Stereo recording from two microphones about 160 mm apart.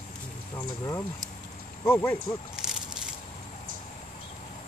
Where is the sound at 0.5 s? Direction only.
20° left (ahead or behind).